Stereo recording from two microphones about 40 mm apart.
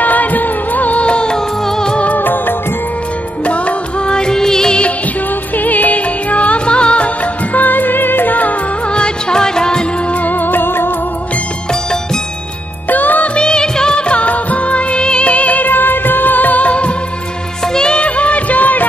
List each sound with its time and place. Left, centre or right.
0.0 s music of bollywood: left
1.0 s music: left
2.1 s music of bollywood: left
4.1 s music: centre
5.6 s music: left
7.5 s music: left
8.9 s music: left
10.2 s music: left
12.9 s music: left
13.4 s music of bollywood: left
17.7 s music: left